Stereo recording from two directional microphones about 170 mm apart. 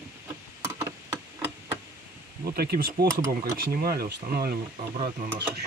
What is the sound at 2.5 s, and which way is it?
Speech, 65° right (ahead or behind).